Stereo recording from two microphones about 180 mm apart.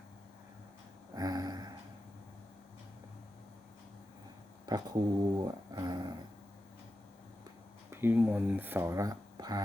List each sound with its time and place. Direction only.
1.1 s a sound: 20° right (ahead or behind)
4.6 s speech: 20° right (ahead or behind)
7.9 s speech: 10° right (ahead or behind)